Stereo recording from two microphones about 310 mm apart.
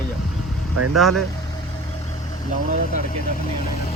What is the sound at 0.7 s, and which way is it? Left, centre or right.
Speech, right.